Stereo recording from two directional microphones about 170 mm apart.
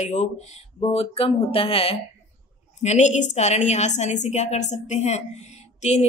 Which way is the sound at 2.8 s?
45° left (ahead or behind).